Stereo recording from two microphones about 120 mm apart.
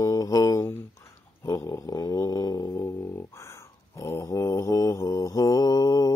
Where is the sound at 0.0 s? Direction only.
30° left (ahead or behind).